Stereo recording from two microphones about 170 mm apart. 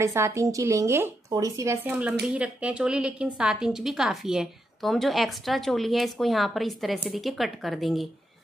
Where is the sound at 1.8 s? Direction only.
10° right (ahead or behind).